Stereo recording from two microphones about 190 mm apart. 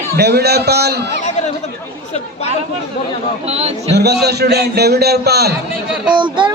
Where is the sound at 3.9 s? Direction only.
60° right (ahead or behind).